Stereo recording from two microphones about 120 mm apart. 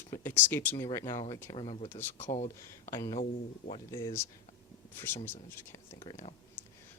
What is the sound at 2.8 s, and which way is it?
Speech, 25° left (ahead or behind).